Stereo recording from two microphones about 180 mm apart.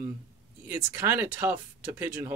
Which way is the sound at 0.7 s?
10° right (ahead or behind).